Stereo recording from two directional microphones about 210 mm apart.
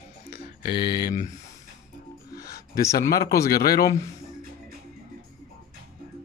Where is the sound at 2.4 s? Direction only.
15° left (ahead or behind).